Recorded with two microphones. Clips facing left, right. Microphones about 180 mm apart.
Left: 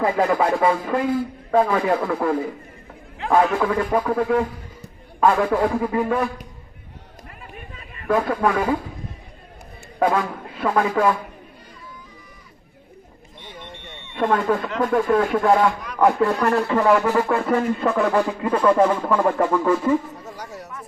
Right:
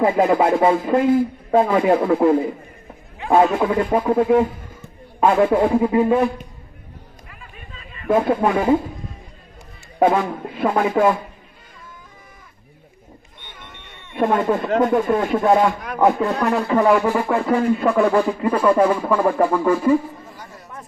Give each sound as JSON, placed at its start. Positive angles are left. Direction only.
{"t": 0.0, "sound": "a man's voice", "side_deg": -25}
{"t": 8.0, "sound": "a man's voice", "side_deg": -25}
{"t": 10.0, "sound": "a man's voice", "side_deg": -25}
{"t": 14.8, "sound": "a man's voice", "side_deg": -25}
{"t": 20.2, "sound": "a sound", "side_deg": 80}